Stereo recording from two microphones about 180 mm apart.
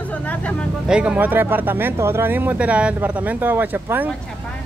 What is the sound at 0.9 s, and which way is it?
Speech, 5° right (ahead or behind).